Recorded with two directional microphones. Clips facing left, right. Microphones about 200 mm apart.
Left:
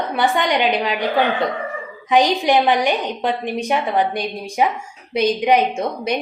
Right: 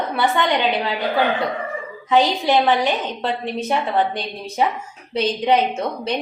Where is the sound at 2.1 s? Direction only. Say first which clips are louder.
Left 1 dB; 15° left (ahead or behind).